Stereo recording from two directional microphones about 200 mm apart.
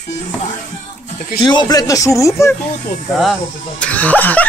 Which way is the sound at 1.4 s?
20° left (ahead or behind).